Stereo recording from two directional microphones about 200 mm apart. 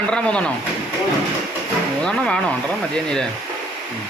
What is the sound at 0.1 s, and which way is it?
Speech, 5° left (ahead or behind).